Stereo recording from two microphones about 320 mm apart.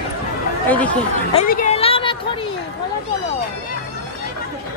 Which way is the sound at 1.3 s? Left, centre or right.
Left.